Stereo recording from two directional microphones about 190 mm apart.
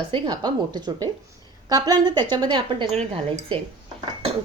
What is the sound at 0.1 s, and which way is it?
A woman's voice, 25° right (ahead or behind).